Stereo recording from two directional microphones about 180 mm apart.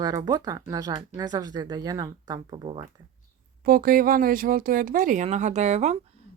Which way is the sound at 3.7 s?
55° right (ahead or behind).